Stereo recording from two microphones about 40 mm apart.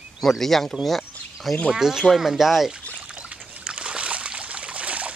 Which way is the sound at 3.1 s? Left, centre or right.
Right.